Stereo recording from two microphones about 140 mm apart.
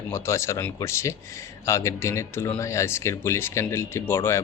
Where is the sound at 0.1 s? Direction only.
20° left (ahead or behind).